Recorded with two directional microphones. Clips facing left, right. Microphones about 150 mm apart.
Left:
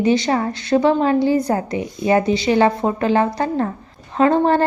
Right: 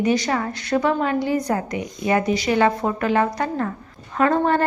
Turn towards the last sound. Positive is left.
turn(degrees=30)  # may be behind; listen again after turning